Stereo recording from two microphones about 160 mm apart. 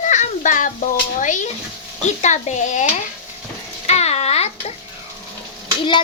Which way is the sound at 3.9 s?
40° left (ahead or behind).